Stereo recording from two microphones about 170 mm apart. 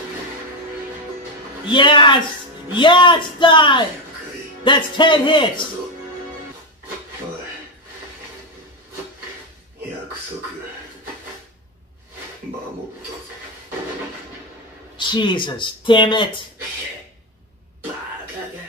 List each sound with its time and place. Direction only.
1.7 s speech: 30° left (ahead or behind)
15.0 s speech: 25° left (ahead or behind)